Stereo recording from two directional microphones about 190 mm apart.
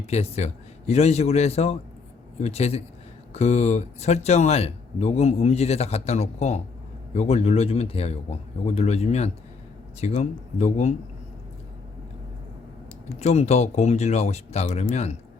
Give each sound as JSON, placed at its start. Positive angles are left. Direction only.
{"t": 0.0, "sound": "speech", "side_deg": 35}
{"t": 13.1, "sound": "speech", "side_deg": 35}